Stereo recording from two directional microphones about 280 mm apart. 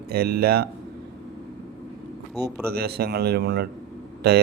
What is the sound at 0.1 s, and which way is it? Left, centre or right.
Speech, right.